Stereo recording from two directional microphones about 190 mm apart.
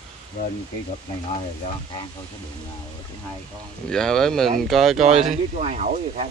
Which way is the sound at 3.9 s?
5° left (ahead or behind).